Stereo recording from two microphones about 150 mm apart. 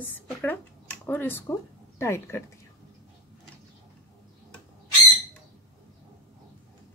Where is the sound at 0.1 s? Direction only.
10° left (ahead or behind).